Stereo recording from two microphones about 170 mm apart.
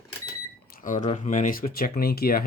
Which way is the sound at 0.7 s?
50° left (ahead or behind).